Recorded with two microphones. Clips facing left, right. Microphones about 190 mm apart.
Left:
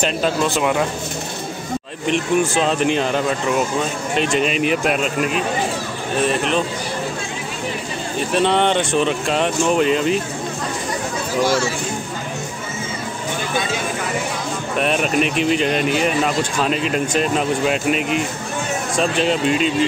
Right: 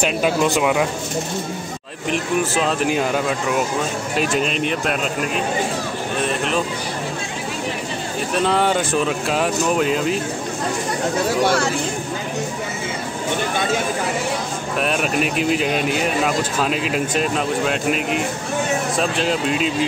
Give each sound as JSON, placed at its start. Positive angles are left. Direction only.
{"t": 0.0, "sound": "speech", "side_deg": -10}
{"t": 2.0, "sound": "speech", "side_deg": -5}
{"t": 6.2, "sound": "speech", "side_deg": 0}
{"t": 8.4, "sound": "speech", "side_deg": -5}
{"t": 11.4, "sound": "speech", "side_deg": -60}
{"t": 14.8, "sound": "speech", "side_deg": 0}